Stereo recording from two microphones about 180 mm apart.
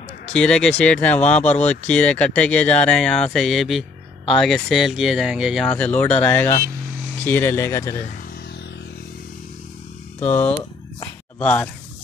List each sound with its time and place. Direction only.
0.3 s speech: 5° left (ahead or behind)
10.2 s speech: 10° left (ahead or behind)